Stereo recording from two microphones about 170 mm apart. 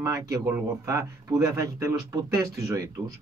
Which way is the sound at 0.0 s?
20° right (ahead or behind).